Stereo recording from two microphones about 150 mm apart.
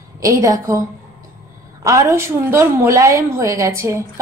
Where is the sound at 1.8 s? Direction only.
20° right (ahead or behind).